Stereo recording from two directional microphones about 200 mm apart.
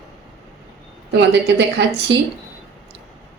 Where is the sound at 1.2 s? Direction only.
60° right (ahead or behind).